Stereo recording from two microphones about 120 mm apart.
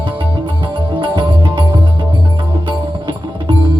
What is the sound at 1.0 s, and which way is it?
Music, 40° right (ahead or behind).